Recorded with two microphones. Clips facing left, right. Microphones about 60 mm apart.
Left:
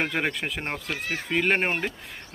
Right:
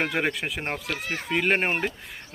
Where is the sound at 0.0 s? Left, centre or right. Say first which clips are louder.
Right 1 dB; centre.